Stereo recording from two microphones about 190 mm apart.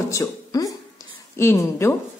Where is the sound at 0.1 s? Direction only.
20° left (ahead or behind).